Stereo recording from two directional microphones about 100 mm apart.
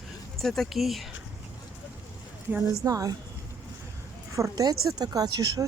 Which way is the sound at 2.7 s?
35° right (ahead or behind).